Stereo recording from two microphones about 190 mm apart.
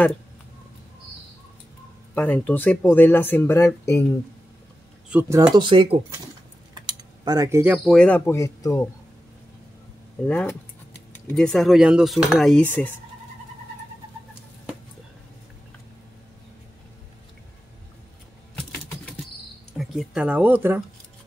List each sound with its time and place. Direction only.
2.1 s speech: 10° left (ahead or behind)
5.1 s speech: 5° right (ahead or behind)
5.6 s speech: 25° right (ahead or behind)
6.7 s mechanisms: 20° right (ahead or behind)
7.9 s speech: 5° left (ahead or behind)
10.2 s speech: 5° left (ahead or behind)
11.2 s fowl: 5° left (ahead or behind)
18.6 s typing: 5° left (ahead or behind)
19.8 s speech: 5° right (ahead or behind)